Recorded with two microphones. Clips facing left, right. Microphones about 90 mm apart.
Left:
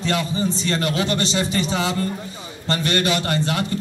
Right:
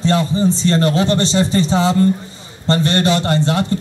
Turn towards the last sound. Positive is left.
turn(degrees=-30)  # may be behind; listen again after turning